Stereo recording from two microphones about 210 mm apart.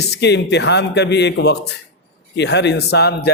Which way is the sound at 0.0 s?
55° left (ahead or behind).